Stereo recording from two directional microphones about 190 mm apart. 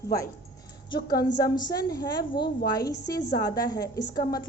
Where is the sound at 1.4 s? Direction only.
20° left (ahead or behind).